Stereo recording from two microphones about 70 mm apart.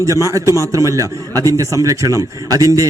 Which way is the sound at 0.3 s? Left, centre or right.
Right.